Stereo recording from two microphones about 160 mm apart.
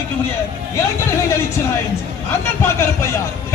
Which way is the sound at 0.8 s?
15° left (ahead or behind).